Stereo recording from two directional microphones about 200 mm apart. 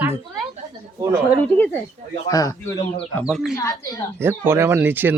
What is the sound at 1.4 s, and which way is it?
Speech, 5° left (ahead or behind).